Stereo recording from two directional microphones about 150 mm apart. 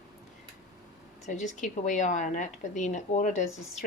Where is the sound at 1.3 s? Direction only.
50° left (ahead or behind).